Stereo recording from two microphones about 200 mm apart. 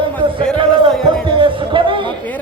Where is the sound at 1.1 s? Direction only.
25° right (ahead or behind).